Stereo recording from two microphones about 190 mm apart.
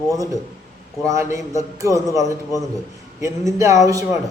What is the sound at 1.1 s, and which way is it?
A man's voice, 15° right (ahead or behind).